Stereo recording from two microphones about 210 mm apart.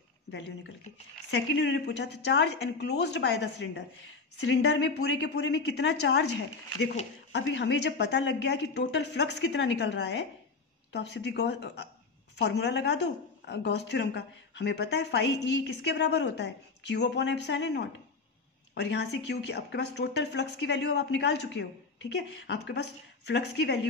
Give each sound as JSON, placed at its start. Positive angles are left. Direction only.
{"t": 1.3, "sound": "speech", "side_deg": 55}
{"t": 7.3, "sound": "a woman's voice", "side_deg": 55}